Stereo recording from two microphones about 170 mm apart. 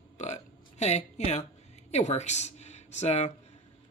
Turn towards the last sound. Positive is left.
turn(degrees=40)  # may be behind; listen again after turning